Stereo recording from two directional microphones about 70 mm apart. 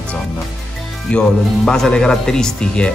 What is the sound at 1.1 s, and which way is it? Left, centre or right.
Speech, centre.